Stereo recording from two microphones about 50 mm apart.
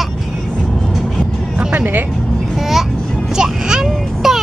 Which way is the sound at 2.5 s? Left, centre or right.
Centre.